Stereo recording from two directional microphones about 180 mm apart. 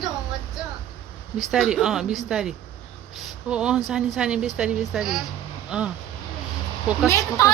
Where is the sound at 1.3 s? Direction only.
5° right (ahead or behind).